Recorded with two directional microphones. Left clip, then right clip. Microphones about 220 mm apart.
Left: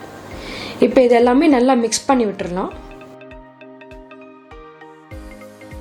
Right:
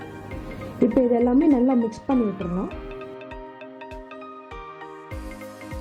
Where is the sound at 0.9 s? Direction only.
15° left (ahead or behind).